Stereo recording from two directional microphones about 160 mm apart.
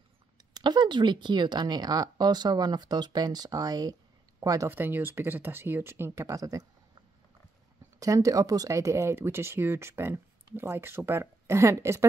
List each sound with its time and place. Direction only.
0.6 s speech: 30° right (ahead or behind)
8.0 s speech: 20° right (ahead or behind)